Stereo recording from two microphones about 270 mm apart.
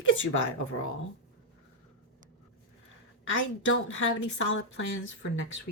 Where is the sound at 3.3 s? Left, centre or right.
Left.